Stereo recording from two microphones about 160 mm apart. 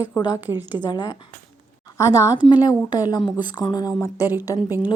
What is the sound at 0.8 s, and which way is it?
Speech, 25° left (ahead or behind).